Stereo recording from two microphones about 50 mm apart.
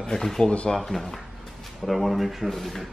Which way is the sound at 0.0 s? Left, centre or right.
Centre.